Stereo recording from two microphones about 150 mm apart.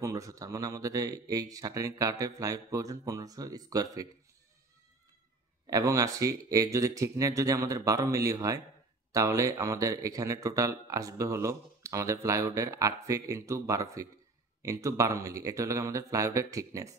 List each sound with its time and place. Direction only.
0.0 s speech: 20° right (ahead or behind)
5.7 s speech: 20° right (ahead or behind)